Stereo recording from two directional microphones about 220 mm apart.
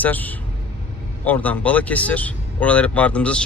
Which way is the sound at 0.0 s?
5° left (ahead or behind).